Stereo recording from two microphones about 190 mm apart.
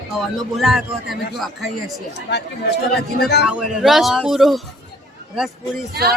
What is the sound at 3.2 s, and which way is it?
Speech, 60° left (ahead or behind).